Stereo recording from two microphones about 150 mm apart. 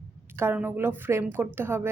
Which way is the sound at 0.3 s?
15° right (ahead or behind).